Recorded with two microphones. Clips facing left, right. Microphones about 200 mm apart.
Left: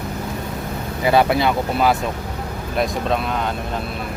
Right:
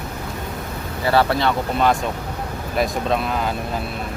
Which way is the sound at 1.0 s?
15° left (ahead or behind).